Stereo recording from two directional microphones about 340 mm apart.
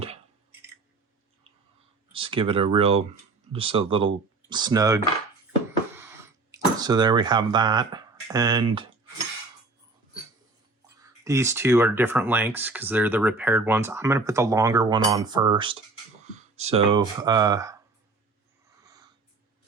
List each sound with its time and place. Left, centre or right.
2.1 s speech: centre
6.0 s a sound: centre
11.0 s speech: centre